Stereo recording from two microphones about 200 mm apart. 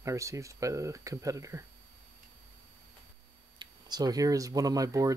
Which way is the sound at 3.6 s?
20° right (ahead or behind).